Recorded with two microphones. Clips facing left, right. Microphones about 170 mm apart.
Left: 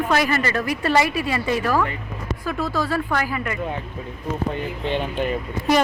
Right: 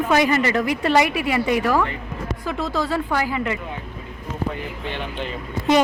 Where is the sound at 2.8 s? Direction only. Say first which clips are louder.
Right 1 dB; 15° right (ahead or behind).